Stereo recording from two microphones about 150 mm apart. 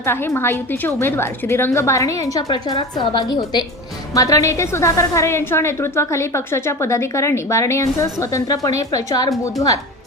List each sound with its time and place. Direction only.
0.0 s a woman's voice: 15° left (ahead or behind)